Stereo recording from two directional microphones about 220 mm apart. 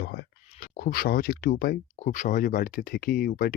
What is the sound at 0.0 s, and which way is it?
Speech, 45° left (ahead or behind).